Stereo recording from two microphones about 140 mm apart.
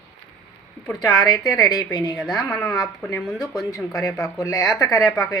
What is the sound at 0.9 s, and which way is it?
Speech, 30° left (ahead or behind).